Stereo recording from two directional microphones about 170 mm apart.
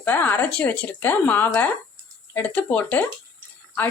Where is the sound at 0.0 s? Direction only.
10° left (ahead or behind).